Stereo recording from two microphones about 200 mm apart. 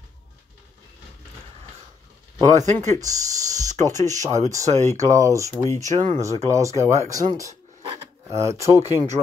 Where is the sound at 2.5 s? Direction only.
35° right (ahead or behind).